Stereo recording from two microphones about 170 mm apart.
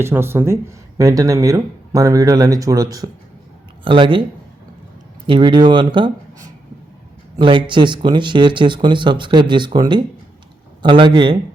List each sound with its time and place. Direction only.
0.0 s speech: 15° right (ahead or behind); by 4.2 s 30° right (ahead or behind)
5.2 s speech: 30° right (ahead or behind)
5.9 s a sound: 25° right (ahead or behind)
7.3 s speech: 30° right (ahead or behind)